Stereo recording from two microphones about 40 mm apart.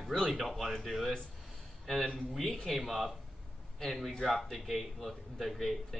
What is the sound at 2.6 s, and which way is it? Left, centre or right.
A man's voice, centre.